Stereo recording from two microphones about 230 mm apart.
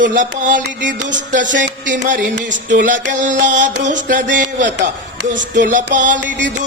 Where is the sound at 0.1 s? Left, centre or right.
Right.